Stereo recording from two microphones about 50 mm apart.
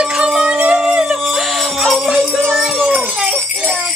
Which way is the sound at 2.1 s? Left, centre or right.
Centre.